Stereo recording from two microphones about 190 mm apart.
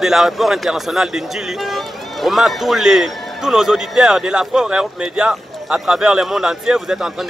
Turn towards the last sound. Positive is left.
turn(degrees=-5)  # may be behind; listen again after turning